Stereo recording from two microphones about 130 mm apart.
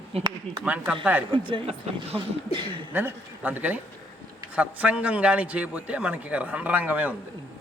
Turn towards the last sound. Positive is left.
turn(degrees=-10)  # may be behind; listen again after turning